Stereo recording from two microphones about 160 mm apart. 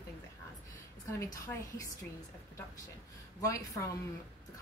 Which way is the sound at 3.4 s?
20° left (ahead or behind).